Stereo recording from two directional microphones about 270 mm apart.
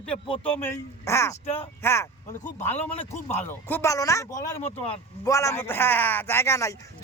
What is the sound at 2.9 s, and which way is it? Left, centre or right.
Speech, left.